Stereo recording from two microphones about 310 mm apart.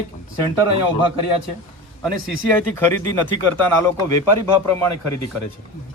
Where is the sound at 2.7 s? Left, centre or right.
Centre.